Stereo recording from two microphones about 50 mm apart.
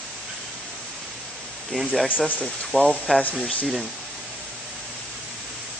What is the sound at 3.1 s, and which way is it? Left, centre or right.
Speech, left.